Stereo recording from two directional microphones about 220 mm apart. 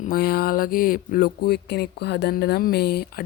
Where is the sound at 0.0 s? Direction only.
40° left (ahead or behind).